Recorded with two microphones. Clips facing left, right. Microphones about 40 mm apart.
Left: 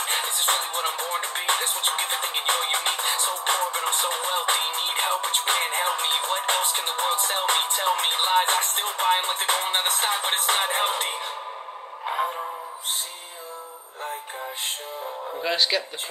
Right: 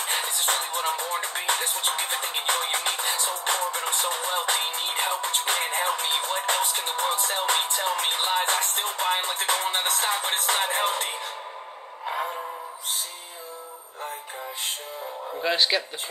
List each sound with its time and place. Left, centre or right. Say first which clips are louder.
0.0 s music: left 2 dB; left
12.1 s music: left 3 dB; centre
15.4 s speech: right 1 dB; centre